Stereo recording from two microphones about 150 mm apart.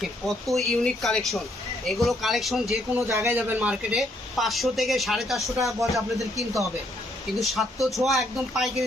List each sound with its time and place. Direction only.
0.0 s a woman's voice: centre (ahead or behind)
2.9 s a woman's voice: 15° right (ahead or behind); by 8.7 s centre (ahead or behind)